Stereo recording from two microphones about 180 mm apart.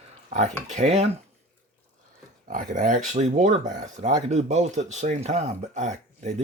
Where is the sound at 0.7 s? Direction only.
40° right (ahead or behind).